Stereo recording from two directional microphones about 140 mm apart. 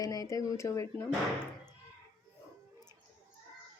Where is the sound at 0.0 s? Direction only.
25° left (ahead or behind).